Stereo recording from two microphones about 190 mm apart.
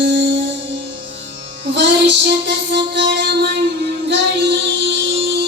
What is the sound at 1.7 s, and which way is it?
Music, 65° right (ahead or behind).